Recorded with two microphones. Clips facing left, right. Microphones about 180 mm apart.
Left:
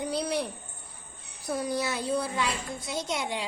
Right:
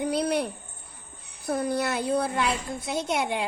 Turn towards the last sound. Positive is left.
turn(degrees=-55)  # may be behind; listen again after turning